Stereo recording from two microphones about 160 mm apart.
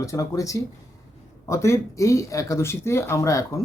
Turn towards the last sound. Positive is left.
turn(degrees=20)  # may be behind; listen again after turning